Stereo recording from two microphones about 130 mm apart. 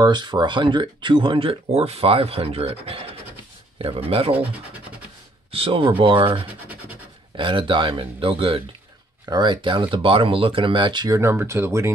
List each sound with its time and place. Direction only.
0.0 s speech: 35° right (ahead or behind)
4.3 s speech: 10° right (ahead or behind)
5.5 s speech: 45° right (ahead or behind)
11.1 s speech: 20° right (ahead or behind)